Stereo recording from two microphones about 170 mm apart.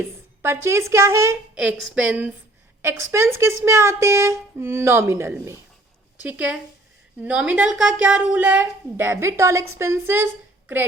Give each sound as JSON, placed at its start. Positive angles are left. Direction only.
{"t": 0.0, "sound": "a woman's voice", "side_deg": -15}